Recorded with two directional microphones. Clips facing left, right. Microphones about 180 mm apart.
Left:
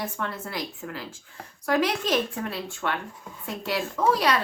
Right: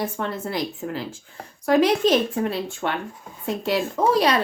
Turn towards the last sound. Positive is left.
turn(degrees=-25)  # may be behind; listen again after turning